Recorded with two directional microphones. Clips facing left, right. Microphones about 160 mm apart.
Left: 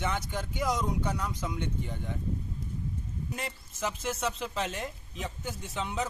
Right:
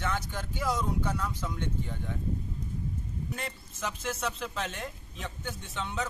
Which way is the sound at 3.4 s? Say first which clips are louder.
Left 2 dB; 5° left (ahead or behind).